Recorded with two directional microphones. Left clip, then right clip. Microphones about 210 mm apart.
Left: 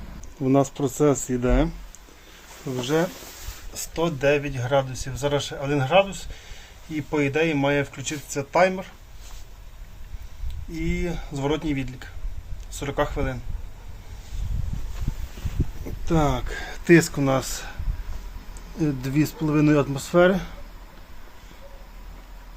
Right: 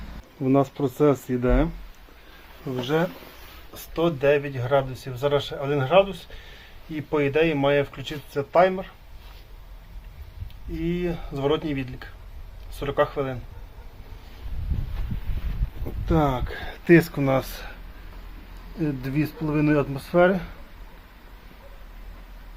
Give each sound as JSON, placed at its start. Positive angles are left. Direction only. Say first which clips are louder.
{"t": 0.4, "sound": "speech", "louder": "left 1 dB", "side_deg": 10}
{"t": 10.8, "sound": "speech", "louder": "right 1 dB", "side_deg": 0}
{"t": 16.0, "sound": "speech", "louder": "even", "side_deg": 5}
{"t": 18.8, "sound": "speech", "louder": "left 3 dB", "side_deg": 20}